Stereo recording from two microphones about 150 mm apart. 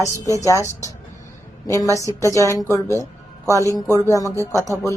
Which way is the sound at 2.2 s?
20° left (ahead or behind).